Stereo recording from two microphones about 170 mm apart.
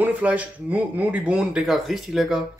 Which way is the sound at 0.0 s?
10° right (ahead or behind).